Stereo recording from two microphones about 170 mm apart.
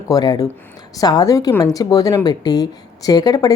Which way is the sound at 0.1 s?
20° left (ahead or behind).